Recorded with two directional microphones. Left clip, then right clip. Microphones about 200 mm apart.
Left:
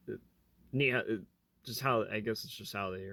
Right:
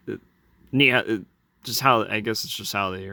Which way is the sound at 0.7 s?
30° right (ahead or behind).